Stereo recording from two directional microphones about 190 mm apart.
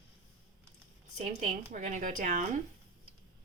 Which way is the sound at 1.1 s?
40° right (ahead or behind).